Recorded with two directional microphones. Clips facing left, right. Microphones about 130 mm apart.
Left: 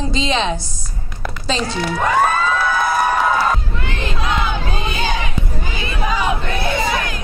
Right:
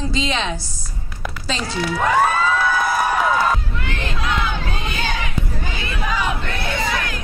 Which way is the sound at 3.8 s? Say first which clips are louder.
Left 2 dB; 20° left (ahead or behind).